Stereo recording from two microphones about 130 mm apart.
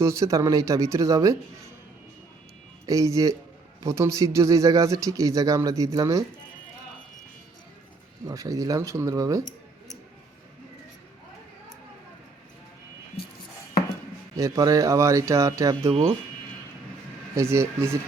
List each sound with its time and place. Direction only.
0.0 s speech: 25° right (ahead or behind)
2.8 s speech: 25° right (ahead or behind)
8.3 s speech: 25° right (ahead or behind)
9.4 s a sound: 80° left
14.3 s speech: 25° right (ahead or behind)
15.9 s speech: 50° right (ahead or behind)
17.3 s speech: 20° right (ahead or behind)